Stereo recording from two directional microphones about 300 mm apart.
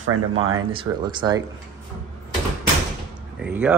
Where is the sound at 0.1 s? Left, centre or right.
Right.